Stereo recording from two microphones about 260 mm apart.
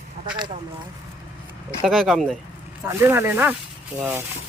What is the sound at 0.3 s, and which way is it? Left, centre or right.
Speech, centre.